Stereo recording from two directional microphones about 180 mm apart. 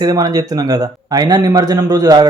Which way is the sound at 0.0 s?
20° right (ahead or behind).